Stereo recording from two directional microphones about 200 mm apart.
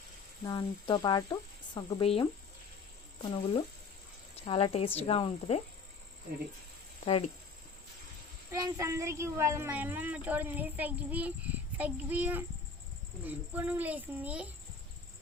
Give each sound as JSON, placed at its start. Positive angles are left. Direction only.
{"t": 0.4, "sound": "speech", "side_deg": 20}
{"t": 3.2, "sound": "speech", "side_deg": 25}
{"t": 7.0, "sound": "speech", "side_deg": 30}
{"t": 8.5, "sound": "speech", "side_deg": -15}